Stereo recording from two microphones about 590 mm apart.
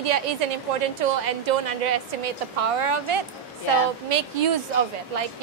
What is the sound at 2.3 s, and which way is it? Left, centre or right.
Speech, right.